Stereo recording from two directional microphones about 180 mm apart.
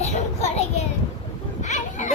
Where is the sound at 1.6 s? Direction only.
40° left (ahead or behind).